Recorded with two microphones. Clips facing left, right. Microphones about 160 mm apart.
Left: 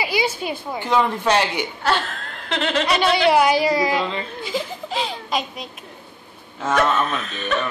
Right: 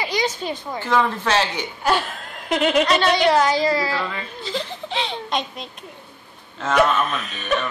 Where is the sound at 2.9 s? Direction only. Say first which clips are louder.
Even; 10° left (ahead or behind).